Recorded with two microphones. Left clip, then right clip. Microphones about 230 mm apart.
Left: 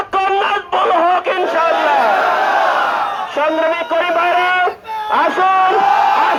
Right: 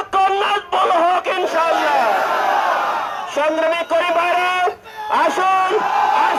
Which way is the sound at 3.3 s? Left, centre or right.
Right.